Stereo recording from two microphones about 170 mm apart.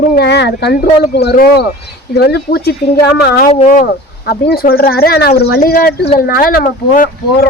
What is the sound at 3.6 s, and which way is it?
Speech, 60° left (ahead or behind).